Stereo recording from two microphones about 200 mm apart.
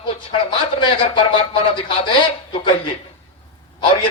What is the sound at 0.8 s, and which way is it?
Speech, 25° left (ahead or behind).